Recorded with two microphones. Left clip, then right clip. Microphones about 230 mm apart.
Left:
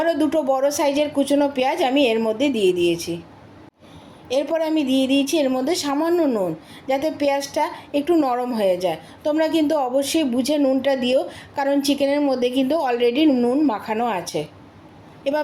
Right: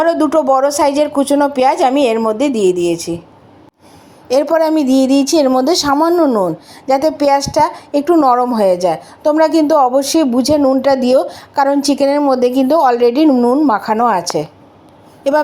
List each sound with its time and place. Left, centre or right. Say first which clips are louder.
0.0 s speech: right 8 dB; right
4.4 s speech: right 9 dB; right